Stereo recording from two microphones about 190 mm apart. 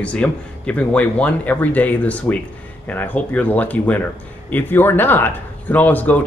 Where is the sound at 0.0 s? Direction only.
5° left (ahead or behind).